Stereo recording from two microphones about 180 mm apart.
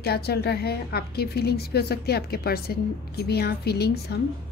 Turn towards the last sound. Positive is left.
turn(degrees=65)  # may be behind; listen again after turning